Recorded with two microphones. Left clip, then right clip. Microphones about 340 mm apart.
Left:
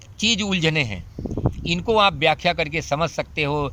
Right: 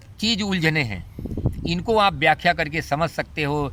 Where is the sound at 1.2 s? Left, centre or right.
Left.